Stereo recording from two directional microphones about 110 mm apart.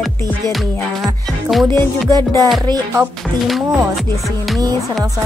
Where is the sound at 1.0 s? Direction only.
Centre (ahead or behind).